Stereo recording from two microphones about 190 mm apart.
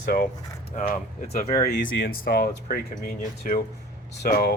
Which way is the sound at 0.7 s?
45° left (ahead or behind).